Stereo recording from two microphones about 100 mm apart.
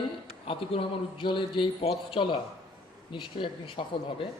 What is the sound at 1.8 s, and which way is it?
Speech, 75° left (ahead or behind).